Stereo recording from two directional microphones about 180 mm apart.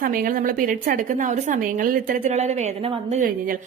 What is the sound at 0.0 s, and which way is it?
A woman's voice, 50° right (ahead or behind).